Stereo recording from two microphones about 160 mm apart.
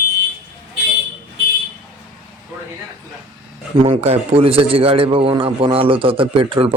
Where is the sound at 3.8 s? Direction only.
40° right (ahead or behind).